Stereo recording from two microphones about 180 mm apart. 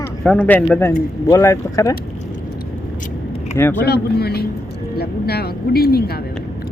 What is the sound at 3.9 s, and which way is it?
Speech, 60° left (ahead or behind).